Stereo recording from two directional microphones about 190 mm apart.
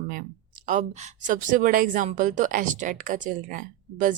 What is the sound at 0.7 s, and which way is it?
Speech, 40° right (ahead or behind).